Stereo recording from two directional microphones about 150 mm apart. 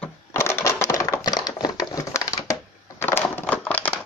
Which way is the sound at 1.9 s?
25° left (ahead or behind).